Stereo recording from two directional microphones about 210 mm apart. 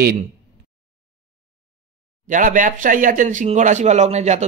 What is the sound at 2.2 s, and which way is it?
Speech, 40° right (ahead or behind).